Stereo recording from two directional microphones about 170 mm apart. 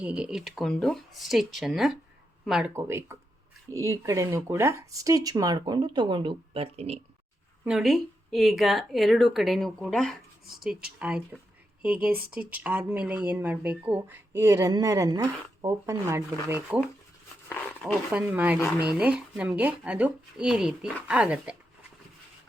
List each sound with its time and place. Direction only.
0.0 s speech: 5° right (ahead or behind)
2.7 s speech: 15° right (ahead or behind); by 7.0 s 35° right (ahead or behind)
7.6 s speech: 5° right (ahead or behind)
18.1 s speech: 10° right (ahead or behind)